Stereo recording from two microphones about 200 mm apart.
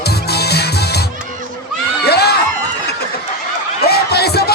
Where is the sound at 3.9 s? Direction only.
55° left (ahead or behind).